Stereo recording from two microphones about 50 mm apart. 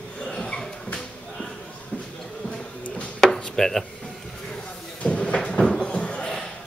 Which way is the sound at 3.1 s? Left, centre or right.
Centre.